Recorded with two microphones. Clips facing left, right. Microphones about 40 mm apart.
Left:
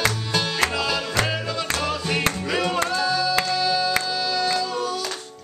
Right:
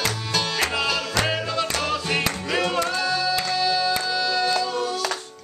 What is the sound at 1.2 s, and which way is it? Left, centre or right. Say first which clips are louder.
Music: right 1 dB; centre.